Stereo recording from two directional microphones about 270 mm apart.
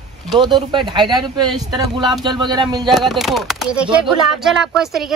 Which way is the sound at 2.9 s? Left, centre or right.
Centre.